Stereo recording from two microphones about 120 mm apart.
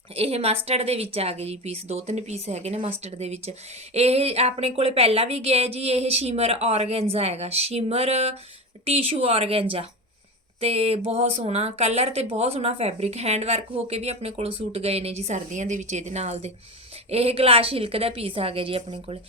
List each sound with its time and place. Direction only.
0.2 s a woman's voice: 55° right (ahead or behind)
17.1 s a woman's voice: 55° right (ahead or behind)